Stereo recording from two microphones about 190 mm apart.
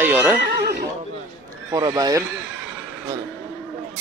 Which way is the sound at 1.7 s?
20° right (ahead or behind).